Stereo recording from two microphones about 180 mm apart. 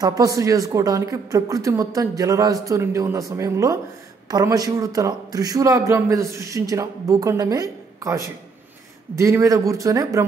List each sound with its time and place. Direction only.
0.0 s a man's voice: 20° right (ahead or behind)